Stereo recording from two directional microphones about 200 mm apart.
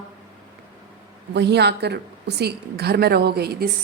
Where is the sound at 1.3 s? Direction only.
55° right (ahead or behind).